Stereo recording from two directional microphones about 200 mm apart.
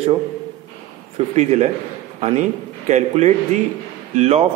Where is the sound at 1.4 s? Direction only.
35° right (ahead or behind).